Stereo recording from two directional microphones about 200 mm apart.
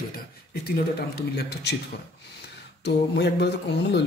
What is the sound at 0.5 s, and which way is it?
A man's voice, 50° left (ahead or behind).